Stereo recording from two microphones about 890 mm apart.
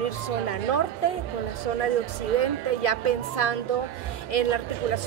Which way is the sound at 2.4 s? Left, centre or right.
Left.